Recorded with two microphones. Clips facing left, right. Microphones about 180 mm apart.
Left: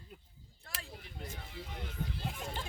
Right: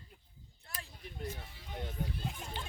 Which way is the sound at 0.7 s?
90° left.